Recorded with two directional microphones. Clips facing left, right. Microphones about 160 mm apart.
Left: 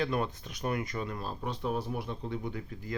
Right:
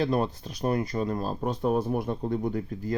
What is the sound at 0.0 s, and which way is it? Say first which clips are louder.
Speech: right 5 dB; 35° right (ahead or behind).